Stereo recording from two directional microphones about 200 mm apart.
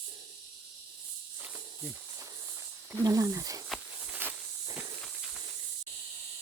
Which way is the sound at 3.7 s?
5° right (ahead or behind).